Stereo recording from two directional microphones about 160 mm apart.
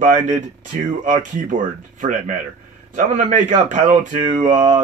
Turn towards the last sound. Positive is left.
turn(degrees=-50)  # may be behind; listen again after turning